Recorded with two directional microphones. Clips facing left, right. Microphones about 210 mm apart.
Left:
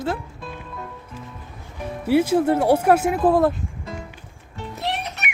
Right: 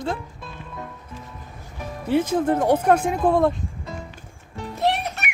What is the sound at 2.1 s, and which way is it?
Speech, 10° left (ahead or behind).